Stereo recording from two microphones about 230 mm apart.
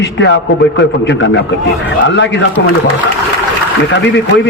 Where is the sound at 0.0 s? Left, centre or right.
Left.